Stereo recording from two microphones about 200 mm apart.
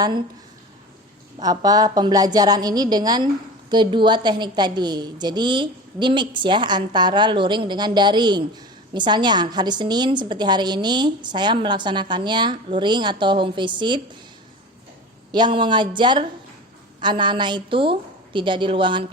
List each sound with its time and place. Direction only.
1.4 s a woman's voice: 20° right (ahead or behind)
15.3 s a woman's voice: 25° right (ahead or behind)